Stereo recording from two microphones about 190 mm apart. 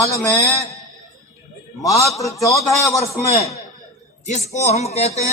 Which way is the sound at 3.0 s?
35° left (ahead or behind).